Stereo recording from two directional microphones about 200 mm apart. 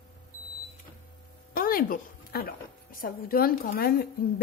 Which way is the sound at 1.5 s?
45° left (ahead or behind).